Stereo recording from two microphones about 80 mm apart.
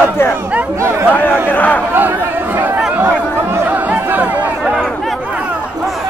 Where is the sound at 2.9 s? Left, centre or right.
Right.